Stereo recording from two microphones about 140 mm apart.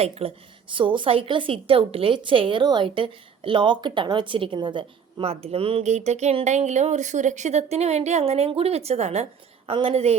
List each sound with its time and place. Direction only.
0.0 s a woman's voice: 45° right (ahead or behind)